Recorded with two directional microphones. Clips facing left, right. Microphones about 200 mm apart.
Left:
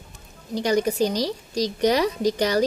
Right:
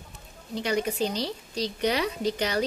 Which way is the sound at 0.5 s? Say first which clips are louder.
Left 6 dB; 40° left (ahead or behind).